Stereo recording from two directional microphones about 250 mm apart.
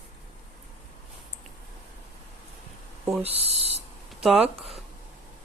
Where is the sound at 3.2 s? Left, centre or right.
Right.